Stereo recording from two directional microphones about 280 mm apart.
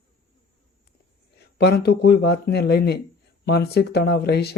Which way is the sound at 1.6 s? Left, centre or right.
Left.